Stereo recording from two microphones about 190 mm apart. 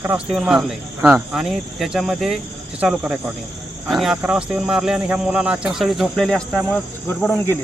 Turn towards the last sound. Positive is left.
turn(degrees=10)  # may be behind; listen again after turning